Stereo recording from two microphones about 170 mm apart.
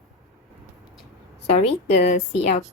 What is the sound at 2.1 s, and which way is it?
Speech, 45° left (ahead or behind).